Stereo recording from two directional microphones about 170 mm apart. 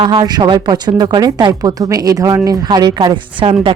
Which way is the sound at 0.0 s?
25° right (ahead or behind).